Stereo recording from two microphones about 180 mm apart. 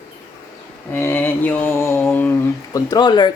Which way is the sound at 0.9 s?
10° left (ahead or behind).